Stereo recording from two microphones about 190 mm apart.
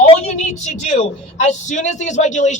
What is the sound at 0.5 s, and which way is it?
A woman's voice, 40° left (ahead or behind).